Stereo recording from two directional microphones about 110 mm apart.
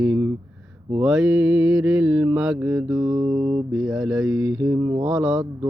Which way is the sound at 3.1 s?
35° right (ahead or behind).